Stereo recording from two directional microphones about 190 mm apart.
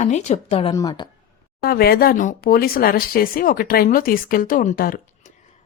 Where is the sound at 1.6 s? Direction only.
55° left (ahead or behind).